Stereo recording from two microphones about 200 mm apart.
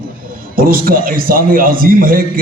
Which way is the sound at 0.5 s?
45° right (ahead or behind).